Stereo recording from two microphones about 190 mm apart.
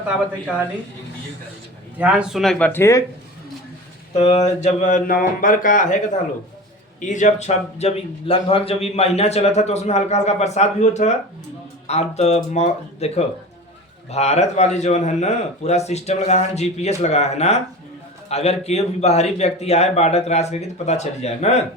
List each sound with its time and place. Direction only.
2.0 s speech: 5° right (ahead or behind); by 3.0 s 15° left (ahead or behind)
4.1 s a man's voice: 35° left (ahead or behind)
7.0 s a man's voice: 40° left (ahead or behind)